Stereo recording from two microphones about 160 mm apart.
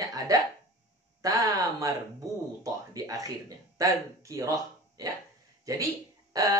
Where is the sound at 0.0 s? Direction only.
20° right (ahead or behind).